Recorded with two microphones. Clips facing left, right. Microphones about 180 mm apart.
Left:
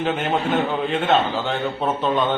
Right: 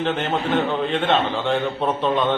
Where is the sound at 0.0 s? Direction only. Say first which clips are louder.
Left 1 dB; 5° left (ahead or behind).